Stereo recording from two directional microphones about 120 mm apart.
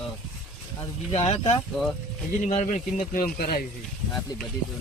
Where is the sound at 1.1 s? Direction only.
60° left (ahead or behind).